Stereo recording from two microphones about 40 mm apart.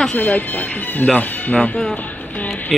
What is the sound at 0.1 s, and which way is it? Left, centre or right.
Speech, left.